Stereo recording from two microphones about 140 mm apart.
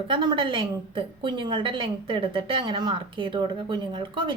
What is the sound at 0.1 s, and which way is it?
A woman's voice, 35° right (ahead or behind).